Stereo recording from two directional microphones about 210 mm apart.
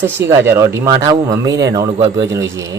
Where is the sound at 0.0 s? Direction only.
10° right (ahead or behind).